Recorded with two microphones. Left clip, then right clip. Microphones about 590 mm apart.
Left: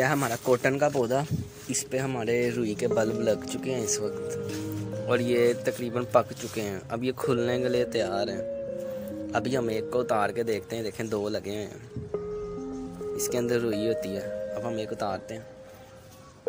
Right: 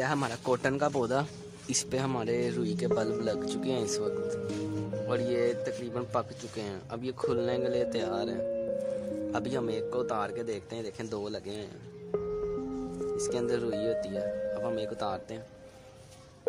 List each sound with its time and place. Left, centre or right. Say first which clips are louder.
0.0 s speech: left 5 dB; right
13.1 s speech: left 4 dB; right